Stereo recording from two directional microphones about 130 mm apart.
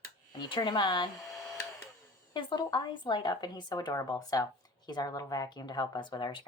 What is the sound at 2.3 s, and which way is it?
Speech, 35° left (ahead or behind).